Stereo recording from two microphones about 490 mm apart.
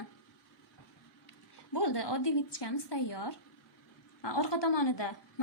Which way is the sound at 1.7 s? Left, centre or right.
Left.